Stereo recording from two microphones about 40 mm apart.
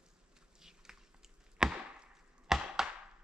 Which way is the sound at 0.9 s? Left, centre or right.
Centre.